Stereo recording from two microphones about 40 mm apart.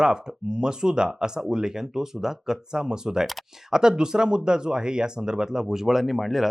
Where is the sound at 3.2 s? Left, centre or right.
Centre.